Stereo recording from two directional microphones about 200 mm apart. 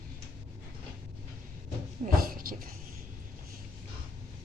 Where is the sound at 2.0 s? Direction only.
45° right (ahead or behind).